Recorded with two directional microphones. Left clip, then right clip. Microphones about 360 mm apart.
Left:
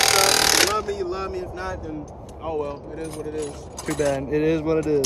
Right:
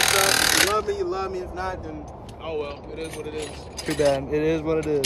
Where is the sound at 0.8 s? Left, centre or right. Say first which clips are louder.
Right 1 dB; centre.